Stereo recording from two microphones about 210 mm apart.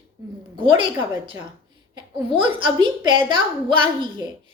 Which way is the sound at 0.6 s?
25° right (ahead or behind).